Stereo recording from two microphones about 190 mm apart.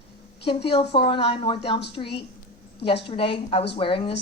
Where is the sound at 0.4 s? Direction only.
30° left (ahead or behind).